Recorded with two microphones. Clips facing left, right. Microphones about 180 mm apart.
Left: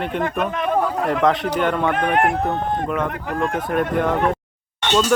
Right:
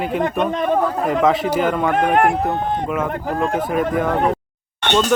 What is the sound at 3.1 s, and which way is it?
Speech, 35° right (ahead or behind).